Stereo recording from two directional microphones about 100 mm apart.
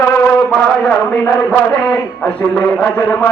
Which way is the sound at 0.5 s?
10° left (ahead or behind).